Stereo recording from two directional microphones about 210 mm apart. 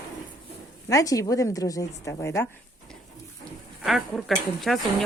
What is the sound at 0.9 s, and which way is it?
A woman's voice, 15° left (ahead or behind).